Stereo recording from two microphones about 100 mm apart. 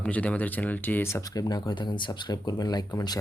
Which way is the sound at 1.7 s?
50° left (ahead or behind).